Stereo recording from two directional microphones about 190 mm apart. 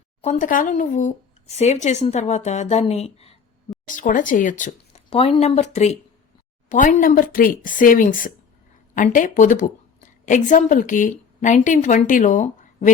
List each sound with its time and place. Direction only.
0.2 s speech: 40° left (ahead or behind)
3.8 s speech: 45° left (ahead or behind)
5.0 s speech: 30° left (ahead or behind)